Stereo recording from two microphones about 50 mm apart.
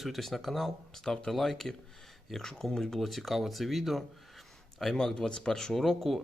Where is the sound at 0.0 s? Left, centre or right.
Centre.